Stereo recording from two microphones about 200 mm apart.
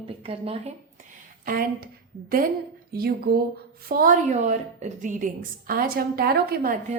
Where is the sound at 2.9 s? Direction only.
50° right (ahead or behind).